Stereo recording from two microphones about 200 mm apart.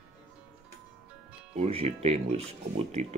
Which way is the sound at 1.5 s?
30° right (ahead or behind).